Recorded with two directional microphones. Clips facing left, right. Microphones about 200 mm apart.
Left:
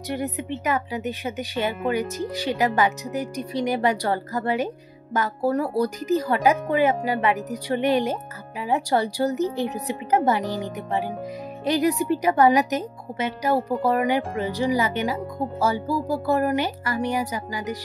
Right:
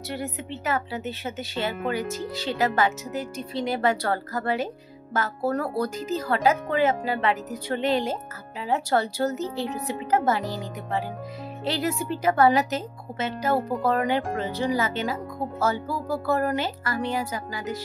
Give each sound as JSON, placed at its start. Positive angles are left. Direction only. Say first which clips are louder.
{"t": 0.1, "sound": "a woman's voice", "louder": "left 5 dB", "side_deg": 15}